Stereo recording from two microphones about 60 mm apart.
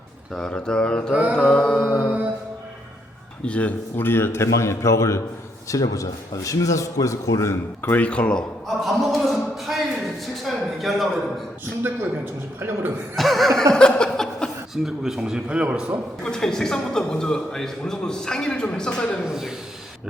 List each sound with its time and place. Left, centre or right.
0.3 s a man's voice: centre
3.4 s a man's voice: left
4.5 s a man's voice: left
5.6 s a man's voice: left
7.8 s speech: left
8.6 s a sound: centre
11.8 s a sound: right
13.1 s chuckle: centre
13.7 s a sound: centre
14.8 s a man's voice: centre
16.2 s a man's voice: centre
19.3 s a man's voice: centre